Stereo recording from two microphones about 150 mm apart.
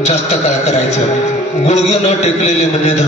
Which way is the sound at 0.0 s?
45° left (ahead or behind).